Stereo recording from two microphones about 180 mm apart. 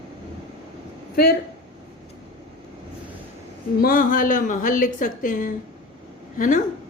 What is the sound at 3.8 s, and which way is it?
A woman's voice, 50° left (ahead or behind).